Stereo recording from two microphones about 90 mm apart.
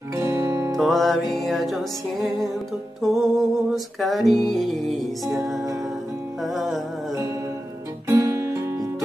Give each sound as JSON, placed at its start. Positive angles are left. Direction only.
{"t": 0.1, "sound": "music", "side_deg": -30}
{"t": 0.7, "sound": "music", "side_deg": 0}
{"t": 8.1, "sound": "music", "side_deg": -35}